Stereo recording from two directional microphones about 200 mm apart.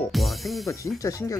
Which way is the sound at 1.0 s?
15° left (ahead or behind).